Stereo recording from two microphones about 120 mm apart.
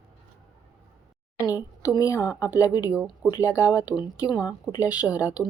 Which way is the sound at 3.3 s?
30° left (ahead or behind).